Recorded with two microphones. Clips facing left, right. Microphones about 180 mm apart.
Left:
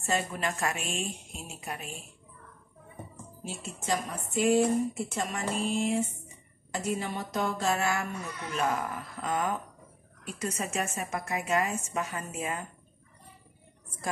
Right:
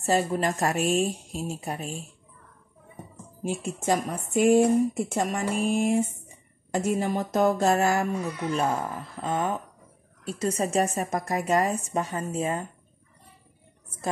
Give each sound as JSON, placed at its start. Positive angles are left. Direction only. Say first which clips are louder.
{"t": 0.0, "sound": "speech", "louder": "right 7 dB", "side_deg": -35}
{"t": 3.4, "sound": "speech", "louder": "right 7 dB", "side_deg": -50}